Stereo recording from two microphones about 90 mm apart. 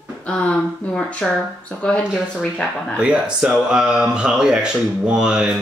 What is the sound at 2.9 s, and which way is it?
Speech, 10° right (ahead or behind).